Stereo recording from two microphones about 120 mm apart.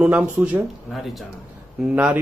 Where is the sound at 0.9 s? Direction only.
Centre (ahead or behind).